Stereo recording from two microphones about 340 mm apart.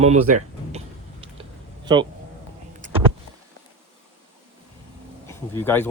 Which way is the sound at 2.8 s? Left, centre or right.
Right.